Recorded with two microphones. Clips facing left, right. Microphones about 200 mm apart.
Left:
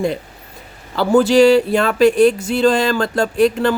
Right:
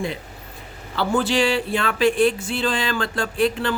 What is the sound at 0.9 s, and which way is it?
Speech, 40° left (ahead or behind).